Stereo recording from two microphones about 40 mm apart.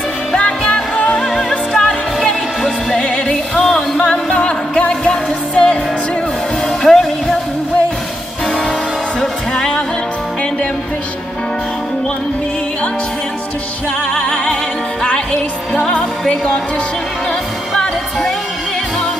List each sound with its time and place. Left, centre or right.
0.4 s music: left
1.8 s music: centre
3.0 s music: left
3.6 s music: centre
4.0 s music: left
5.1 s music: centre
6.9 s music: centre
9.2 s music: centre
14.1 s music: left
15.9 s music: left